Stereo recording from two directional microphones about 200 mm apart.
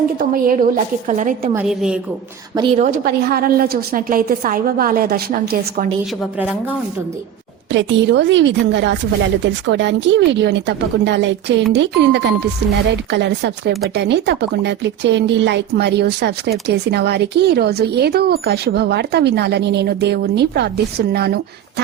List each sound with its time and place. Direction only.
0.2 s a woman's voice: 45° right (ahead or behind)
1.5 s a woman's voice: 5° right (ahead or behind)
2.7 s a woman's voice: 40° right (ahead or behind)
6.4 s a woman's voice: 10° right (ahead or behind)
7.7 s speech: 65° right (ahead or behind)